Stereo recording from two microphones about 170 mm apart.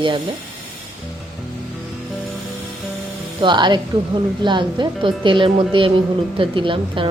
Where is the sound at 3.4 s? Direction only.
25° right (ahead or behind).